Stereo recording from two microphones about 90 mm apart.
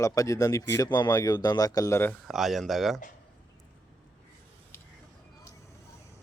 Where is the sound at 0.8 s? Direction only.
50° left (ahead or behind); by 2.1 s 30° left (ahead or behind).